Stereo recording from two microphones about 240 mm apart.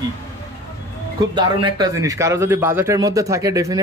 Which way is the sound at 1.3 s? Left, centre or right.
Centre.